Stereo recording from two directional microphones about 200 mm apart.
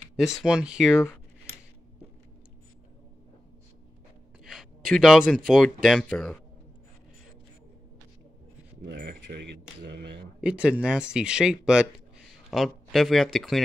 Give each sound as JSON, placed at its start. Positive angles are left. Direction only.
{"t": 0.4, "sound": "speech", "side_deg": -5}
{"t": 4.5, "sound": "speech", "side_deg": 0}
{"t": 8.8, "sound": "speech", "side_deg": -55}
{"t": 10.4, "sound": "speech", "side_deg": -5}